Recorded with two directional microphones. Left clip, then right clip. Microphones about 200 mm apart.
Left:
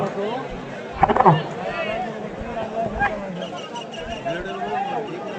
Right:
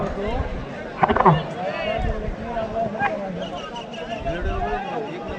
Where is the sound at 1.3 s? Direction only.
20° left (ahead or behind).